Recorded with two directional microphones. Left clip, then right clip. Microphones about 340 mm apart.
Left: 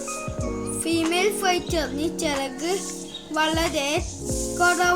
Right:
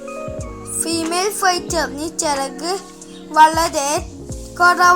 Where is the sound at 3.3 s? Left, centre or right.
Centre.